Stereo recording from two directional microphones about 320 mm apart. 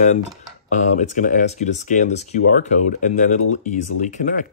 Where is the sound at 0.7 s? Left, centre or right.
Left.